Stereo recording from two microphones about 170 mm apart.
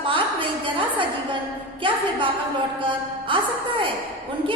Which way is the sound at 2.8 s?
30° right (ahead or behind).